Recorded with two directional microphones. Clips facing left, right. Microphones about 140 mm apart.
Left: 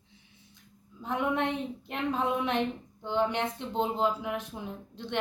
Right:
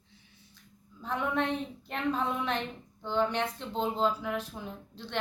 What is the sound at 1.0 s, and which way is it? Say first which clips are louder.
Speech: left 1 dB; 15° left (ahead or behind).